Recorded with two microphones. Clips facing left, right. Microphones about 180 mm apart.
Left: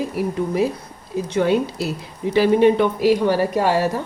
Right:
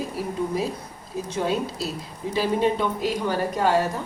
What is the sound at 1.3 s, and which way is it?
Speech, 70° left (ahead or behind).